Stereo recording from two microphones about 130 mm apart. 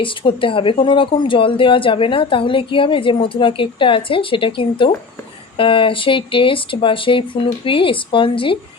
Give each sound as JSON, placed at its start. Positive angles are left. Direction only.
{"t": 0.0, "sound": "a woman's voice", "side_deg": 40}